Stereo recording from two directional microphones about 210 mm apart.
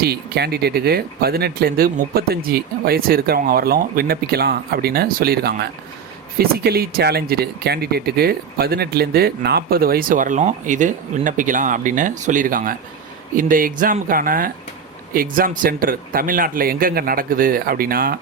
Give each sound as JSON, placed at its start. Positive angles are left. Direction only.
{"t": 0.0, "sound": "speech", "side_deg": -50}